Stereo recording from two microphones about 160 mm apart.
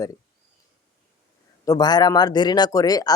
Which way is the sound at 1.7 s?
25° left (ahead or behind).